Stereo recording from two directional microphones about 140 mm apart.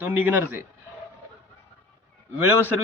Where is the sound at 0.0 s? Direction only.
10° right (ahead or behind).